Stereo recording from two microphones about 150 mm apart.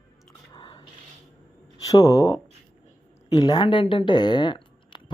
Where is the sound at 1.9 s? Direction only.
25° left (ahead or behind).